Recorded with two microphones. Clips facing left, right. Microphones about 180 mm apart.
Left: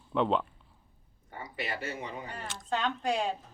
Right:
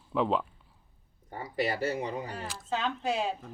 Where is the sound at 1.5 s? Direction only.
35° right (ahead or behind).